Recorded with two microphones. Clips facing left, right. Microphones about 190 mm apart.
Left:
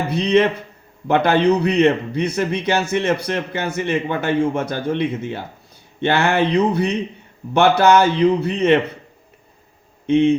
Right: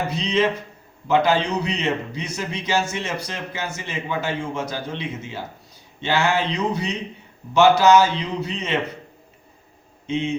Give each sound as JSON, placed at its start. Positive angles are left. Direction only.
{"t": 0.1, "sound": "a man's voice", "side_deg": 60}
{"t": 10.1, "sound": "a man's voice", "side_deg": 60}